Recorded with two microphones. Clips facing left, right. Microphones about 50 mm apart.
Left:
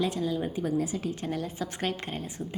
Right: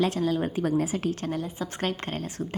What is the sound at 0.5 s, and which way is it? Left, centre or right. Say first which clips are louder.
Speech: right 3 dB; right.